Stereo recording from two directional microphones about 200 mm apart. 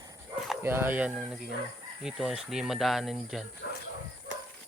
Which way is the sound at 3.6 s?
55° left (ahead or behind).